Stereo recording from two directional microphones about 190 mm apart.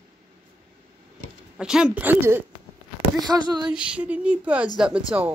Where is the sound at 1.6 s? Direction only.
5° right (ahead or behind).